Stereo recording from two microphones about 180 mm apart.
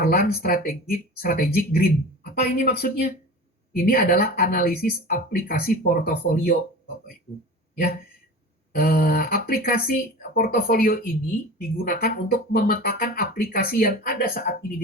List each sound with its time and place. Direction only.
0.0 s speech: 55° left (ahead or behind)
8.8 s speech: 60° left (ahead or behind)